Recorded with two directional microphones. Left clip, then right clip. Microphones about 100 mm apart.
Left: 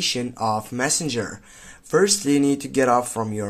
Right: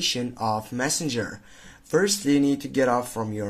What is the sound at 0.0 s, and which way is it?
Speech, 25° left (ahead or behind).